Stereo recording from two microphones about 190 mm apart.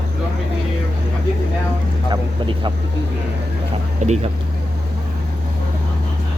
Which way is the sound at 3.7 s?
30° right (ahead or behind).